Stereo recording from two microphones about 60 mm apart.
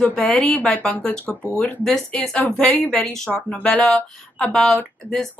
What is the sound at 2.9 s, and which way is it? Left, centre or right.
Speech, centre.